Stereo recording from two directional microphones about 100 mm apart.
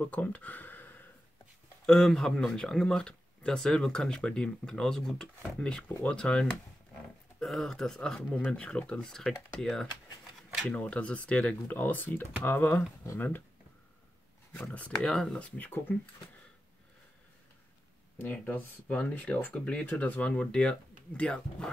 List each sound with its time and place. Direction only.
0.0 s speech: 15° left (ahead or behind)
1.9 s speech: 5° left (ahead or behind); by 13.4 s 25° left (ahead or behind)
14.5 s speech: 15° left (ahead or behind)
15.5 s speech: 20° left (ahead or behind)
18.1 s speech: 20° left (ahead or behind)